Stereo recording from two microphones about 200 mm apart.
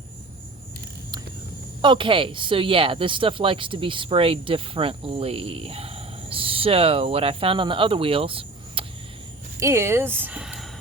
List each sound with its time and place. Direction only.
1.8 s speech: 25° right (ahead or behind)
9.6 s speech: 15° right (ahead or behind)